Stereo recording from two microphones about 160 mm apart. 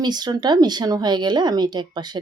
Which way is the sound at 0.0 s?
25° right (ahead or behind).